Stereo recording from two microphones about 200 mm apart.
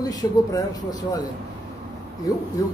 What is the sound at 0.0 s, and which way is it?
A man's voice, 20° left (ahead or behind).